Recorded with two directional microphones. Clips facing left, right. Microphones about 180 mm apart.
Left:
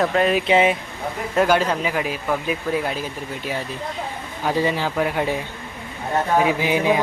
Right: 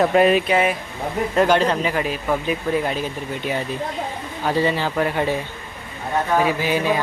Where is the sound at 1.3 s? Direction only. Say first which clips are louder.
Right 1 dB; 5° left (ahead or behind).